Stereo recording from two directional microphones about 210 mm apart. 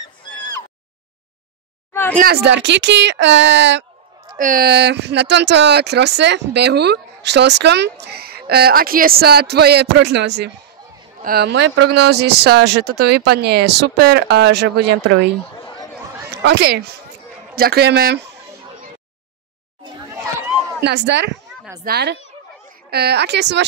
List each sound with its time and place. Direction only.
2.1 s speech: 50° right (ahead or behind)
4.4 s speech: 40° right (ahead or behind)
16.3 s speech: 50° right (ahead or behind)
20.3 s a sound: 5° right (ahead or behind)
20.8 s speech: 55° right (ahead or behind)